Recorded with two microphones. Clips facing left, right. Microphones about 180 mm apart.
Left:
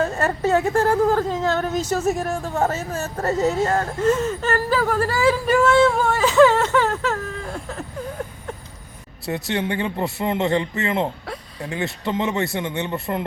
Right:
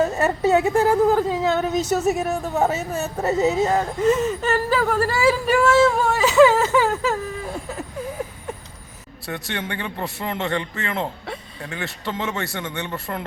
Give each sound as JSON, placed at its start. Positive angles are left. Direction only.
{"t": 0.0, "sound": "a woman's voice", "side_deg": -5}
{"t": 0.6, "sound": "a woman's voice", "side_deg": -15}
{"t": 0.9, "sound": "speech", "side_deg": -5}
{"t": 9.5, "sound": "a man's voice", "side_deg": 25}